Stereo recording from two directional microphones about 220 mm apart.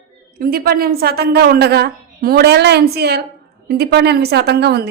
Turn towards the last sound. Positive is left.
turn(degrees=-50)  # may be behind; listen again after turning